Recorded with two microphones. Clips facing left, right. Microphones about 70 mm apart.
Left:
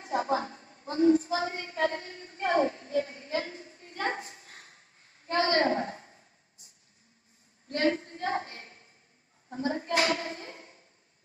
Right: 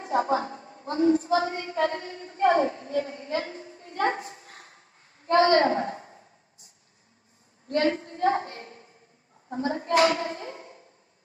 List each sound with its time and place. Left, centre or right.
0.0 s a woman's voice: right
7.6 s a woman's voice: right